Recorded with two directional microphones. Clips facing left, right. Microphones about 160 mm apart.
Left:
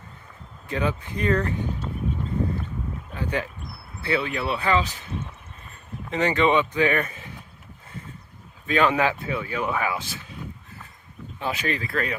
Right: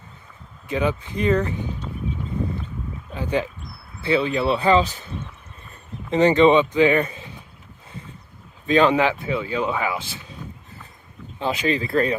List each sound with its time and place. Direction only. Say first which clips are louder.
0.7 s speech: right 3 dB; 20° right (ahead or behind)
3.2 s speech: right 5 dB; 20° right (ahead or behind)
6.1 s speech: right 6 dB; 25° right (ahead or behind)
8.6 s speech: right 4 dB; 25° right (ahead or behind)
11.3 s speech: right 5 dB; 20° right (ahead or behind)